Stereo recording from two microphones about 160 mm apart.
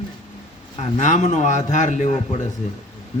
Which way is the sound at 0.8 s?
50° left (ahead or behind).